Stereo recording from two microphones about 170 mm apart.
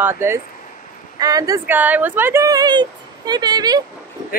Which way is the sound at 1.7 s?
10° right (ahead or behind).